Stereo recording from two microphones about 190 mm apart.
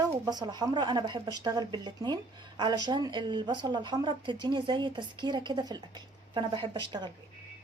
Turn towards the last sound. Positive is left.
turn(degrees=-25)  # may be behind; listen again after turning